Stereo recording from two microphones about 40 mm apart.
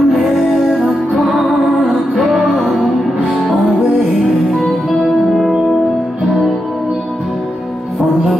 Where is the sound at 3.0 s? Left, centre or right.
Centre.